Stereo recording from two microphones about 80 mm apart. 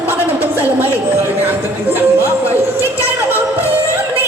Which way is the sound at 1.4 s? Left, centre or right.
Right.